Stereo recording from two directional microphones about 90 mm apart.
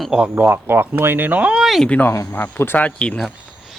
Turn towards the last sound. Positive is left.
turn(degrees=15)  # may be behind; listen again after turning